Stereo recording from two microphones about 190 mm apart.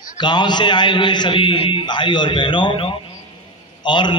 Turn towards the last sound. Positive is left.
turn(degrees=25)  # may be behind; listen again after turning